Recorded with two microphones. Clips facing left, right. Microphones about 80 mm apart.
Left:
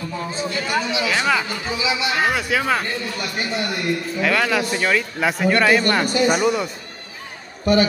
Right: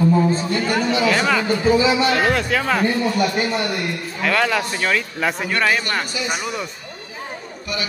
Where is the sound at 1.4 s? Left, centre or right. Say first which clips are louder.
Right 8 dB; right.